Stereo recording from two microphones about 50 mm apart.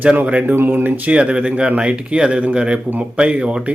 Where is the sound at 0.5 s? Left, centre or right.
Right.